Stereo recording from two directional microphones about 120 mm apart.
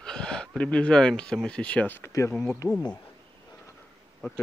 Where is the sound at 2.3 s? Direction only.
5° left (ahead or behind).